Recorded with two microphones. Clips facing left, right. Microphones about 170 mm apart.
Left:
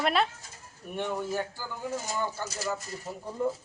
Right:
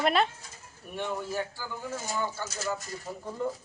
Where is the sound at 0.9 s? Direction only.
15° left (ahead or behind).